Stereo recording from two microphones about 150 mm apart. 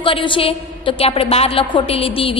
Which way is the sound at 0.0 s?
35° left (ahead or behind).